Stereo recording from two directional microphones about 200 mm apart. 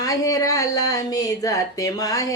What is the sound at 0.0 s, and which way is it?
Speech, 15° left (ahead or behind).